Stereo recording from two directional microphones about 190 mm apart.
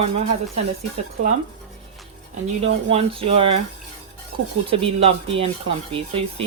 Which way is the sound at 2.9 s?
30° right (ahead or behind).